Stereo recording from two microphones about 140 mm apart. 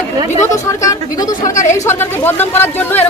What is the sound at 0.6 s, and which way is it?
Speech, 25° left (ahead or behind).